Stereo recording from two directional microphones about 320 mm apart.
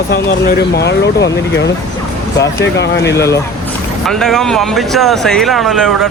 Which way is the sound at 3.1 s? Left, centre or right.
Centre.